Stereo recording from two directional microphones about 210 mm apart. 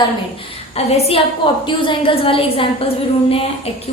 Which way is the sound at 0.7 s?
30° left (ahead or behind).